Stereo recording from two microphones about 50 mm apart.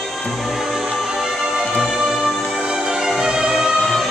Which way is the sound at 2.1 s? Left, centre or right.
Centre.